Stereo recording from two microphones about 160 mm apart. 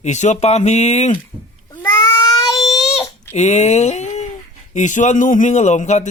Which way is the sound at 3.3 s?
45° left (ahead or behind).